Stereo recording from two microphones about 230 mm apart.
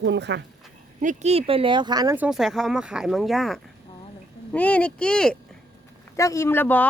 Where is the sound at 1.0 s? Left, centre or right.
Right.